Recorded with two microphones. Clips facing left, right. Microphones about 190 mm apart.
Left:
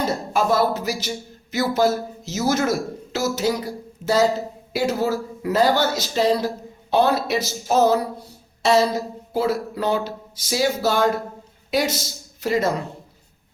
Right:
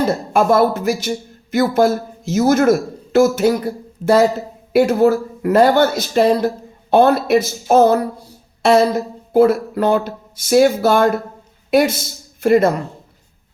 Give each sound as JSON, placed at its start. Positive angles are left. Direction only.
{"t": 0.0, "sound": "speech", "side_deg": -55}